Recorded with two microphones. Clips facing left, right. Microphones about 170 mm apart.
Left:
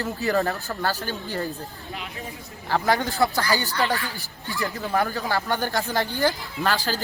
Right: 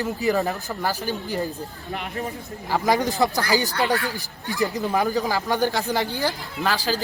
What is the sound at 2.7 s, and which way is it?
A man's voice, 5° right (ahead or behind).